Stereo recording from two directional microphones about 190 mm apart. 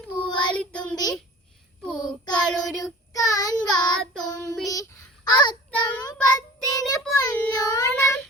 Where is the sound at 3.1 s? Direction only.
20° left (ahead or behind).